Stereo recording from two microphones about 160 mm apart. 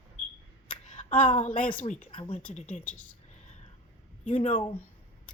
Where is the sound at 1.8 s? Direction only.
55° left (ahead or behind).